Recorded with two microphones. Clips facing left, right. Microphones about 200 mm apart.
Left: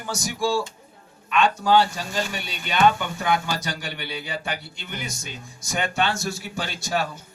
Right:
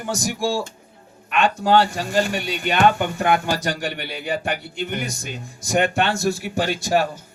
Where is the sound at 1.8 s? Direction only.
55° right (ahead or behind).